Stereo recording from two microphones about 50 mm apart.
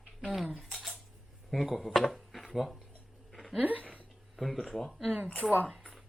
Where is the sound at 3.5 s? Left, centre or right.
Right.